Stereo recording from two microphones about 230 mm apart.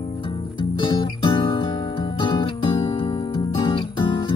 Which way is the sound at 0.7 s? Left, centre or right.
Centre.